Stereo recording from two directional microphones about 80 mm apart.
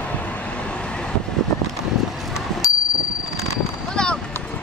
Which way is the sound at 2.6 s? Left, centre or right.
Left.